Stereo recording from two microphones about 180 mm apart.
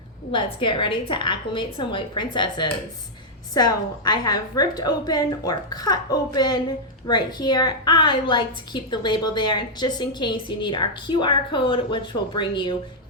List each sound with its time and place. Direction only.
0.3 s a woman's voice: 30° left (ahead or behind)